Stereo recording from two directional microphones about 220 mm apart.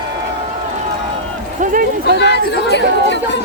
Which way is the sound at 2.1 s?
50° left (ahead or behind).